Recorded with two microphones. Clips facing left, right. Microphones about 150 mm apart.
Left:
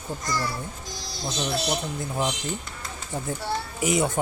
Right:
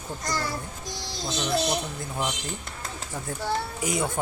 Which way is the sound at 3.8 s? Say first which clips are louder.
Left 4 dB; 20° left (ahead or behind).